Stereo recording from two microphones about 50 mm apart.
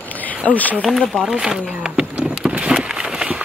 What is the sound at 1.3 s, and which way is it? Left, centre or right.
Speech, centre.